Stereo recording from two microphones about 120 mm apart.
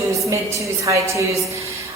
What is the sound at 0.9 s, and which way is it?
Speech, 25° right (ahead or behind).